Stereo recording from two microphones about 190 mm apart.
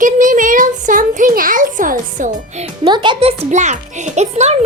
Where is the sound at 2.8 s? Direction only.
25° right (ahead or behind).